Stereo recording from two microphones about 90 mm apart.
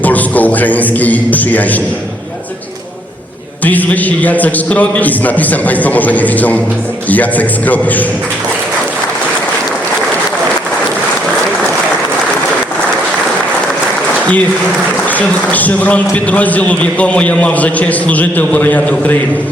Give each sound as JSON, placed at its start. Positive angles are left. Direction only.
{"t": 0.0, "sound": "a man's voice", "side_deg": 20}
{"t": 3.6, "sound": "a man's voice", "side_deg": 20}
{"t": 15.0, "sound": "a man's voice", "side_deg": 15}